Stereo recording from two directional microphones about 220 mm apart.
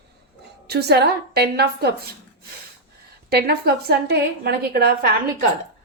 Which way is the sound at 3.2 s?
45° right (ahead or behind).